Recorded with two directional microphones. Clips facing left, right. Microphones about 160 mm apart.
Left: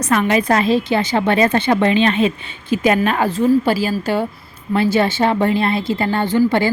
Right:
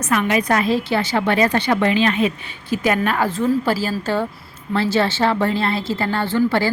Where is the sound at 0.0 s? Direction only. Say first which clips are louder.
Left 3 dB; 35° left (ahead or behind).